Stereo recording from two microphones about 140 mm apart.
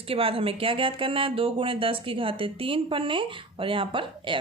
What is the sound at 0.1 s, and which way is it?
Speech, 40° right (ahead or behind).